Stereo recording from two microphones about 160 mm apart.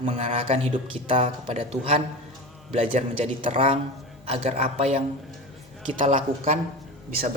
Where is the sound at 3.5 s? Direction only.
45° right (ahead or behind).